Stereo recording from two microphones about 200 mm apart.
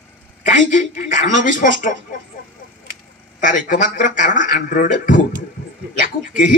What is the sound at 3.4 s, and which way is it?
Speech, 40° left (ahead or behind).